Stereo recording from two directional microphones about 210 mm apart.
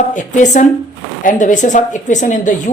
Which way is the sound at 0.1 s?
35° left (ahead or behind).